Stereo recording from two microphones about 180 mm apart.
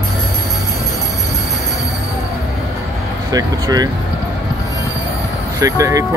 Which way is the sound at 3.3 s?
20° right (ahead or behind).